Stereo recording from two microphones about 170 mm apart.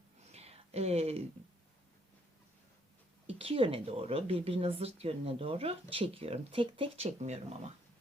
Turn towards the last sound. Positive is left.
turn(degrees=-40)  # may be behind; listen again after turning